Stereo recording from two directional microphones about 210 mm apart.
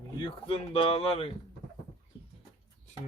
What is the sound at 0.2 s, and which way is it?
Speech, 25° left (ahead or behind).